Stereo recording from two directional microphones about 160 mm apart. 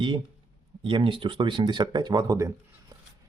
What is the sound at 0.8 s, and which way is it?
Speech, 30° right (ahead or behind).